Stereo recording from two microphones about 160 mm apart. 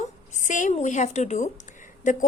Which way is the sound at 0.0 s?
50° left (ahead or behind).